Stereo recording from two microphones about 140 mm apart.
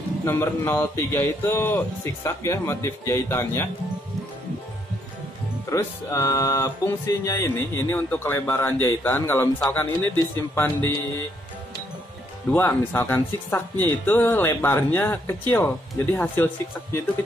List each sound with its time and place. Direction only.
0.2 s speech: 20° left (ahead or behind)
5.7 s speech: 20° left (ahead or behind)
12.4 s speech: 15° left (ahead or behind)